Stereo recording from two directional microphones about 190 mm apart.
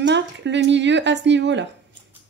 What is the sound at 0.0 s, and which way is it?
Speech, 65° right (ahead or behind).